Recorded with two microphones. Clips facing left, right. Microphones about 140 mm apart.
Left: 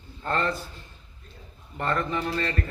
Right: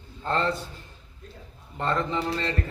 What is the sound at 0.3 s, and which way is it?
Speech, 20° right (ahead or behind).